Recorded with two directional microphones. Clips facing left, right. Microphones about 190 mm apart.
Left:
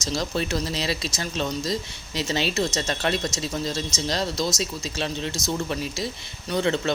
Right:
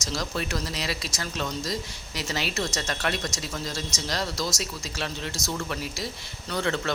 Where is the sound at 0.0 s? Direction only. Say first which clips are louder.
Left 4 dB; 25° left (ahead or behind).